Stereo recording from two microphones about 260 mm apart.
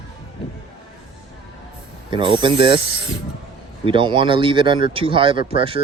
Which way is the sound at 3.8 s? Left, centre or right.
Centre.